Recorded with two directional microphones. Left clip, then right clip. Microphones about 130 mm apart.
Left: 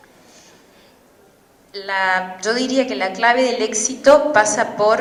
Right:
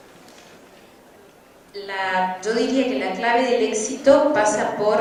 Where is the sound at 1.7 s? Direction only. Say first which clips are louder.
Left 5 dB; 25° left (ahead or behind).